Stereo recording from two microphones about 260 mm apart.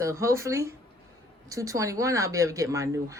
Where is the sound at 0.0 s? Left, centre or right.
Centre.